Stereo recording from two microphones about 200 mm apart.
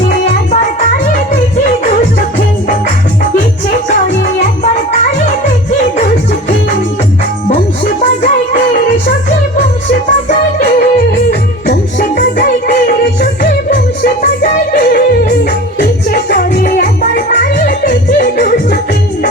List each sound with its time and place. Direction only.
0.1 s music: 40° left (ahead or behind)
9.9 s music: 45° left (ahead or behind)
13.4 s yodeling: 45° left (ahead or behind)
15.8 s music: 45° left (ahead or behind)